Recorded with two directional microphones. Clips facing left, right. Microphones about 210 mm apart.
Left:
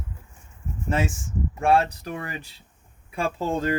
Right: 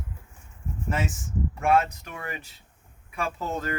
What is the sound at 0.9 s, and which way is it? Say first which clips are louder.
Speech: left 4 dB; 30° left (ahead or behind).